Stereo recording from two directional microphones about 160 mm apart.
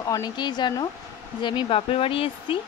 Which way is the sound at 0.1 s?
25° left (ahead or behind).